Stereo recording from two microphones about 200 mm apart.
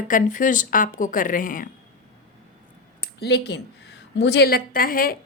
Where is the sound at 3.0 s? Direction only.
55° left (ahead or behind).